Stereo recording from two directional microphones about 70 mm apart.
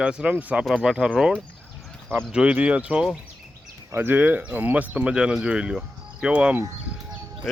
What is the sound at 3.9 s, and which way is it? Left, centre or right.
Speech, right.